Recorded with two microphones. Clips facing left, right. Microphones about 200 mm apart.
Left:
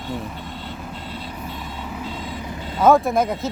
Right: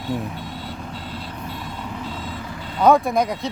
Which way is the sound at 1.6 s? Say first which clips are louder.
Even; 5° left (ahead or behind).